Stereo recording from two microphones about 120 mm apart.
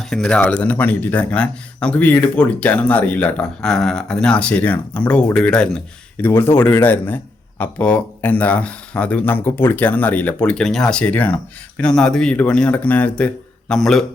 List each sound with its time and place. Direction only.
0.0 s speech: 5° left (ahead or behind)